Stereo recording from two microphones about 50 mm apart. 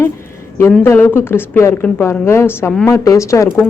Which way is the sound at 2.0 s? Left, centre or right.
Left.